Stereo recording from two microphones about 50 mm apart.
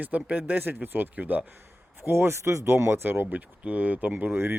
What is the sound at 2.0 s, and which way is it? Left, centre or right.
Speech, right.